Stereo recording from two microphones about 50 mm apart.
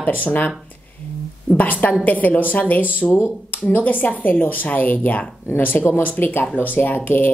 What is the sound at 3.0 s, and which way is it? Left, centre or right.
Speech, centre.